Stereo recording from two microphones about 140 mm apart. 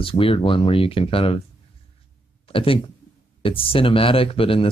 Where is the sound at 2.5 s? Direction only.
40° left (ahead or behind).